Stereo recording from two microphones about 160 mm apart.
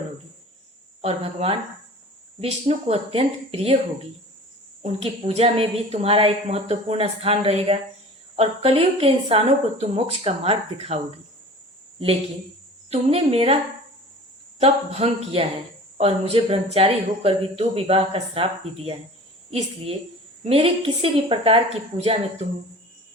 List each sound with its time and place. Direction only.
1.0 s a woman's voice: 35° right (ahead or behind)
4.8 s a woman's voice: 40° right (ahead or behind)
12.9 s a woman's voice: 40° right (ahead or behind)
14.6 s a woman's voice: 40° right (ahead or behind)